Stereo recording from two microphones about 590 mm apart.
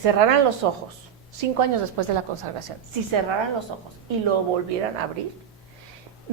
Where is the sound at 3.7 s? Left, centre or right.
Right.